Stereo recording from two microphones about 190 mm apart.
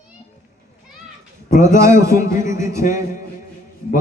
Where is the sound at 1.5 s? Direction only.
15° right (ahead or behind).